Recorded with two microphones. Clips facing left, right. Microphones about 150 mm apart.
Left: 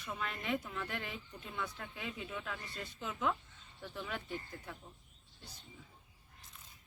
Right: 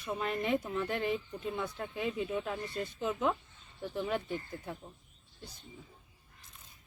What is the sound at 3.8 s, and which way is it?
Speech, 35° right (ahead or behind).